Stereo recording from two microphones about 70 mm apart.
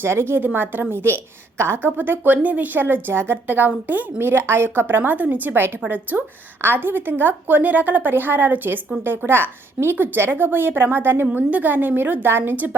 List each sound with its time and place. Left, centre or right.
0.0 s a woman's voice: right
2.8 s a woman's voice: right